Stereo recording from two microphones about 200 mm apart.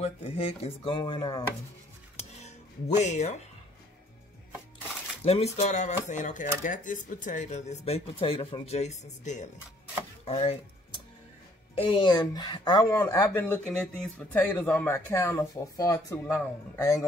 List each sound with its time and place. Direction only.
0.0 s speech: 30° left (ahead or behind)
3.0 s speech: 35° left (ahead or behind)
5.2 s speech: 30° left (ahead or behind)
10.2 s chopping: 30° left (ahead or behind)
11.7 s speech: 25° left (ahead or behind)